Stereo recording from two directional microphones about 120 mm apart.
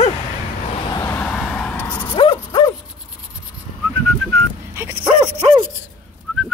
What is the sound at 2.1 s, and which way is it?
Dog, 45° left (ahead or behind).